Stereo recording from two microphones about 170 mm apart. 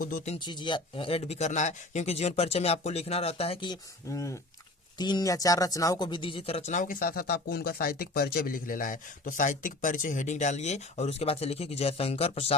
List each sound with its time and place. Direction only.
0.3 s speech: 25° left (ahead or behind)